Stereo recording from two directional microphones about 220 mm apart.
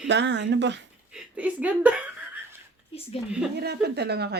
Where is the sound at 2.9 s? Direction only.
25° left (ahead or behind).